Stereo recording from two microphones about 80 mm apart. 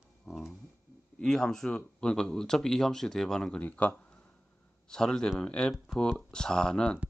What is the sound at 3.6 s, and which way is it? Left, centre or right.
Speech, left.